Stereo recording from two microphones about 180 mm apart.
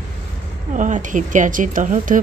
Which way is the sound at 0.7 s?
45° right (ahead or behind).